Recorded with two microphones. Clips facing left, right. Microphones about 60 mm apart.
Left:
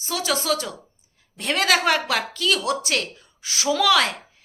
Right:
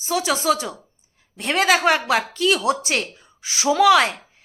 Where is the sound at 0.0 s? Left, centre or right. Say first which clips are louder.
Right 4 dB; centre.